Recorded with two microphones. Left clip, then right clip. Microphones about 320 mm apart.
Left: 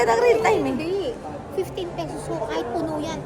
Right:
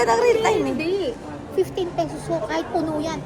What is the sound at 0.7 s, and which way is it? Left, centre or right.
A woman's voice, right.